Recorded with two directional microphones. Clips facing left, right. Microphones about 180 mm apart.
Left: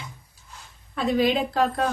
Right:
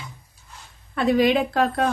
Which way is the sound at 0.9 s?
70° right (ahead or behind).